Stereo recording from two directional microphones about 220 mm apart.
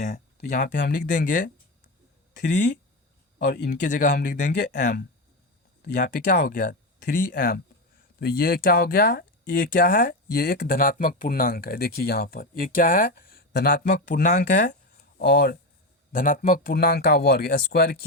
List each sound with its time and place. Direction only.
0.8 s speech: 40° left (ahead or behind)
2.3 s speech: 55° left (ahead or behind); by 4.5 s 35° left (ahead or behind)
5.8 s speech: 40° left (ahead or behind)